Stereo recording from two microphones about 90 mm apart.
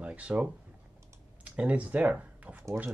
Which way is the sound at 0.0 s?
15° right (ahead or behind).